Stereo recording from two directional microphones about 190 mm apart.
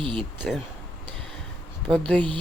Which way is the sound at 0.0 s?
25° right (ahead or behind).